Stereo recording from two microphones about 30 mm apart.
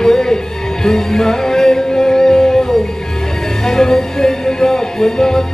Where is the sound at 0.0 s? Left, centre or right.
Centre.